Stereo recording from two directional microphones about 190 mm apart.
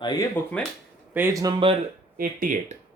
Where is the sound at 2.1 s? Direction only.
45° right (ahead or behind).